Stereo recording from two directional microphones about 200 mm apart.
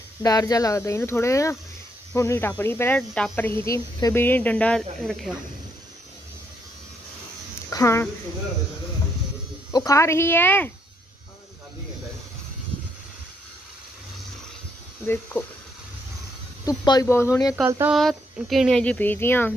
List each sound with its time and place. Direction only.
0.2 s speech: 20° left (ahead or behind); by 5.3 s centre (ahead or behind)
7.7 s speech: 15° left (ahead or behind)
9.7 s speech: 15° left (ahead or behind)
16.6 s speech: 20° left (ahead or behind)
17.6 s a sound: 10° right (ahead or behind)
17.9 s speech: centre (ahead or behind)